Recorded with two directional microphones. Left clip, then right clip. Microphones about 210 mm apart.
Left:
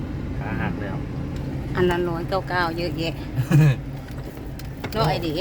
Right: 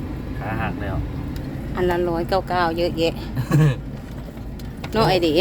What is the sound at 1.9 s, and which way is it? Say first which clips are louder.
Speech: right 3 dB; 15° right (ahead or behind).